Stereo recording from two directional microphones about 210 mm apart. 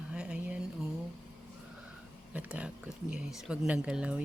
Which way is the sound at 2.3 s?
5° right (ahead or behind).